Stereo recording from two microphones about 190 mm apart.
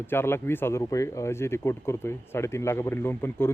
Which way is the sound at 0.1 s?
10° left (ahead or behind).